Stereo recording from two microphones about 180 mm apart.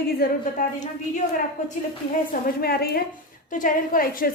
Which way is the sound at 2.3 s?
55° left (ahead or behind).